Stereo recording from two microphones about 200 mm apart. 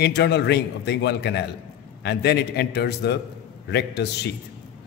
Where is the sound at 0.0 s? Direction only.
55° left (ahead or behind).